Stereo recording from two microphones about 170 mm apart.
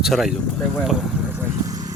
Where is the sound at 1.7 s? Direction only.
20° right (ahead or behind).